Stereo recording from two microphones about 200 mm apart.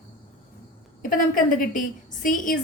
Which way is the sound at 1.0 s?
45° left (ahead or behind).